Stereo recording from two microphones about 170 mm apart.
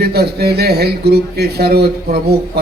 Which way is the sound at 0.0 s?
70° right (ahead or behind).